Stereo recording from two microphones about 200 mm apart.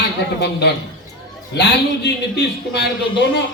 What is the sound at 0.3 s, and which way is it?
A man's voice, 55° left (ahead or behind).